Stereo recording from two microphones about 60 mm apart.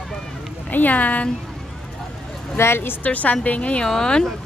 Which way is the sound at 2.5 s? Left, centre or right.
Left.